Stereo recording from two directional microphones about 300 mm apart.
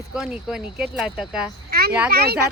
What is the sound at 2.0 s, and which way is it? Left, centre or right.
Speech, right.